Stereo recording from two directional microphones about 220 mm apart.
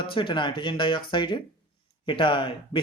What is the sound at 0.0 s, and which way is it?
Speech, 25° left (ahead or behind).